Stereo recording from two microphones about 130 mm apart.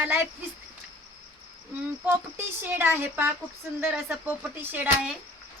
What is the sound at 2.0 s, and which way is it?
Speech, 15° right (ahead or behind).